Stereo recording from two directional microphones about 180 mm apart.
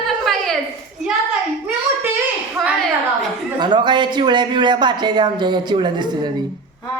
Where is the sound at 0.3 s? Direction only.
Centre (ahead or behind).